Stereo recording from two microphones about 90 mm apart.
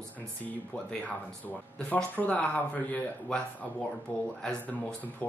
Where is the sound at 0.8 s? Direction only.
15° left (ahead or behind).